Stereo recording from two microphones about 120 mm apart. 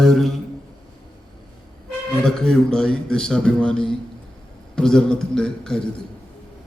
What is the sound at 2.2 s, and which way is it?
A man's voice, 5° left (ahead or behind).